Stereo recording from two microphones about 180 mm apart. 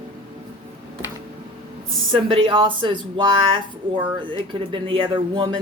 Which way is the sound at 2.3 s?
30° right (ahead or behind).